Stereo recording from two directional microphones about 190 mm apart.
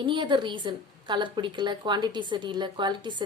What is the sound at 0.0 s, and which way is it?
A woman's voice, 25° right (ahead or behind).